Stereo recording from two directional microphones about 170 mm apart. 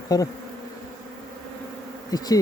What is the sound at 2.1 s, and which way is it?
Bee, 20° left (ahead or behind).